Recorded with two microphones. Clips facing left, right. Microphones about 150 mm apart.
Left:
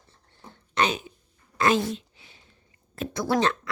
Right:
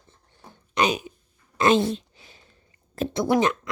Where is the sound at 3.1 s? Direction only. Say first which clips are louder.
Right 3 dB; 20° right (ahead or behind).